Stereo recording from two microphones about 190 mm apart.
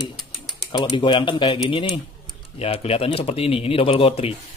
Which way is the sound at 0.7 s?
25° left (ahead or behind).